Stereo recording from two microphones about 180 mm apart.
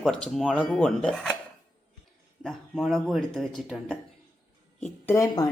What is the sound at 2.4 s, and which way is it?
Speech, centre (ahead or behind).